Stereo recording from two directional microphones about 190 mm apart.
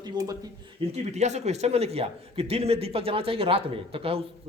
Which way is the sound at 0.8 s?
30° right (ahead or behind).